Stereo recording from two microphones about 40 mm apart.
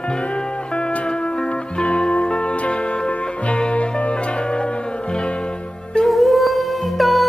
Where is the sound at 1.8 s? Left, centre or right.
Left.